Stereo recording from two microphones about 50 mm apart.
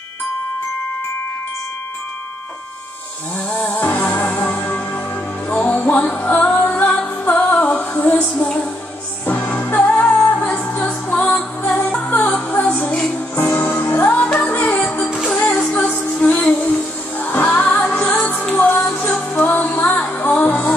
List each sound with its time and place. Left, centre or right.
3.4 s music: left
9.2 s music: left
9.5 s music: left
12.9 s music: centre
13.4 s music: left
18.9 s music: centre
19.5 s music: left